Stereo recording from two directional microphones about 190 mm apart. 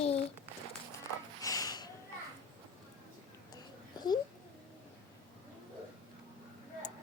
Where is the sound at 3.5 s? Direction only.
20° left (ahead or behind).